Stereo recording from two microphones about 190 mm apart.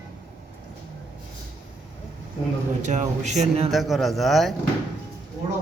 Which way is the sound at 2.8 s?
40° right (ahead or behind).